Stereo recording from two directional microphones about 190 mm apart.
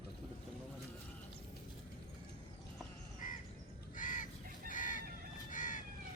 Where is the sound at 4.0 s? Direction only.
45° left (ahead or behind).